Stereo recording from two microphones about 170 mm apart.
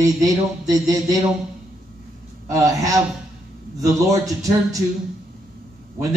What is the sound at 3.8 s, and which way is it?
Speech, 20° right (ahead or behind).